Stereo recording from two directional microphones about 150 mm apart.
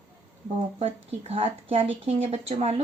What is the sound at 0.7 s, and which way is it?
Speech, 40° right (ahead or behind).